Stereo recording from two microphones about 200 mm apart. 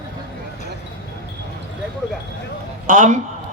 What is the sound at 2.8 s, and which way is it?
Speech, 40° right (ahead or behind).